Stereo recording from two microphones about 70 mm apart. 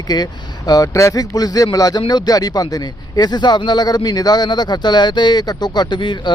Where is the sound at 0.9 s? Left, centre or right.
Left.